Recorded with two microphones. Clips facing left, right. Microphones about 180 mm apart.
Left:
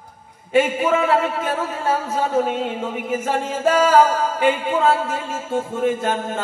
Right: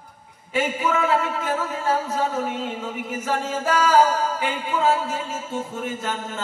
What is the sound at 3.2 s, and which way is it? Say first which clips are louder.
Music: left 3 dB; 55° left (ahead or behind).